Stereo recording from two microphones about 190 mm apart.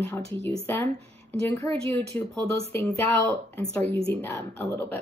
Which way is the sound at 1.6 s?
10° left (ahead or behind).